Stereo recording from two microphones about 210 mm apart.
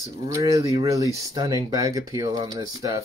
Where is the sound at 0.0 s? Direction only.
15° right (ahead or behind).